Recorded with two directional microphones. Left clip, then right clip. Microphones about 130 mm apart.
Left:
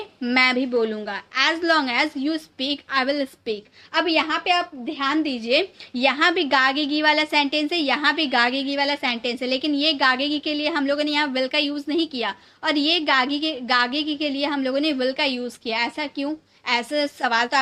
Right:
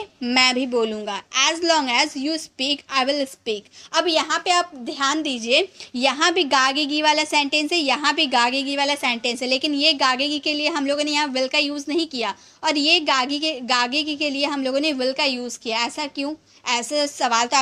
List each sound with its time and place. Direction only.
0.2 s a woman's voice: 35° right (ahead or behind)